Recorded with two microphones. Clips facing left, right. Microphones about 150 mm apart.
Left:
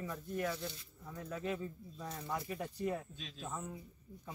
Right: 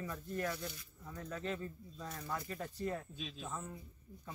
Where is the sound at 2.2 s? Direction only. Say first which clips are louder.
Left 2 dB; 20° left (ahead or behind).